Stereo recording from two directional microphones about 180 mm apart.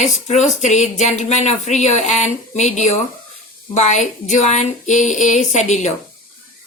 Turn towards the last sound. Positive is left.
turn(degrees=40)  # may be behind; listen again after turning